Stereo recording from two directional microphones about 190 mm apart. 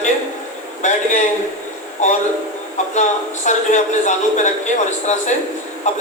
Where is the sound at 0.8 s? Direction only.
40° left (ahead or behind).